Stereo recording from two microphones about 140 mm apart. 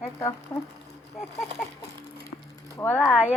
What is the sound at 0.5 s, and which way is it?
Speech, 25° left (ahead or behind).